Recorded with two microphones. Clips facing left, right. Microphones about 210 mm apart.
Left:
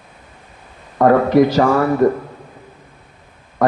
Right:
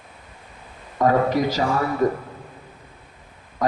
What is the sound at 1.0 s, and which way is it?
Speech, 60° left (ahead or behind).